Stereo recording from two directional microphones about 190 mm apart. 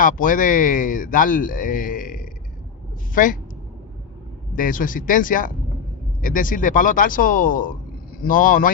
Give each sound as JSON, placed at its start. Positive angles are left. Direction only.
{"t": 0.0, "sound": "speech", "side_deg": 45}
{"t": 4.5, "sound": "speech", "side_deg": 45}